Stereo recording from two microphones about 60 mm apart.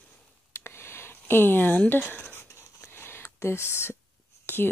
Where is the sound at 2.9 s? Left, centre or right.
Left.